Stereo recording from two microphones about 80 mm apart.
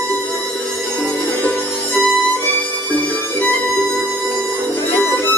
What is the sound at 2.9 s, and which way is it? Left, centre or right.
Music, left.